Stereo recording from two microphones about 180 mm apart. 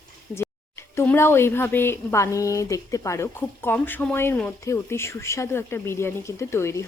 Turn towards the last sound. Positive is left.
turn(degrees=15)  # may be behind; listen again after turning